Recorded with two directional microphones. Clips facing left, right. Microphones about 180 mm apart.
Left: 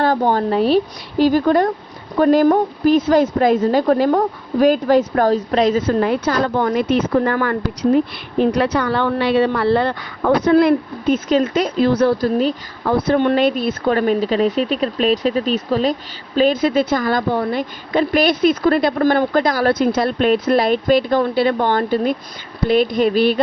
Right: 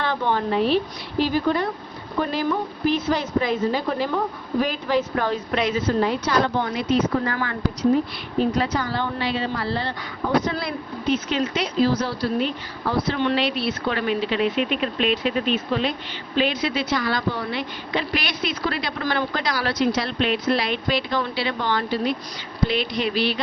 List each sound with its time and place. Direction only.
0.0 s speech: 40° left (ahead or behind)